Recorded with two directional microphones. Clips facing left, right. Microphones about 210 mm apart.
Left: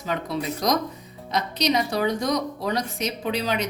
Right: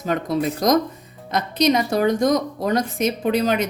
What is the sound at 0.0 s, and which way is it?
Speech, 50° right (ahead or behind).